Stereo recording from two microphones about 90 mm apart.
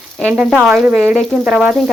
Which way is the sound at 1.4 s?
15° right (ahead or behind).